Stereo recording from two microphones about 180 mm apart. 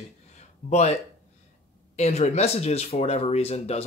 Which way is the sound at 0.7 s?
40° left (ahead or behind).